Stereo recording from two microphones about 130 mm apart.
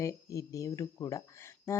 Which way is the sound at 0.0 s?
25° left (ahead or behind).